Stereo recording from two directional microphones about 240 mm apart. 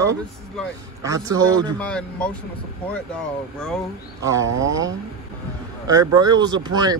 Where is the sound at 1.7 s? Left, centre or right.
Centre.